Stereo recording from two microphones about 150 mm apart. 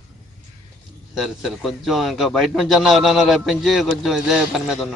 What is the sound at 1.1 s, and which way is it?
A man's voice, centre (ahead or behind).